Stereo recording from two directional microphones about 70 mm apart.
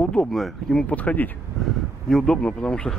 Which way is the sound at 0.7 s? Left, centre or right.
Left.